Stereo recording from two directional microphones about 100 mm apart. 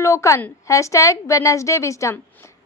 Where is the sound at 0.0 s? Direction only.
30° left (ahead or behind).